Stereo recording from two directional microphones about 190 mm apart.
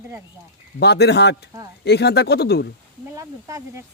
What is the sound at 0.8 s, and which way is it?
Speech, 60° left (ahead or behind).